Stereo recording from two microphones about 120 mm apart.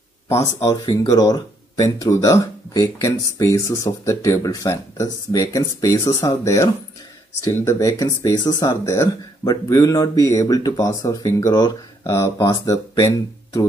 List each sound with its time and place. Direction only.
0.3 s speech: 25° left (ahead or behind)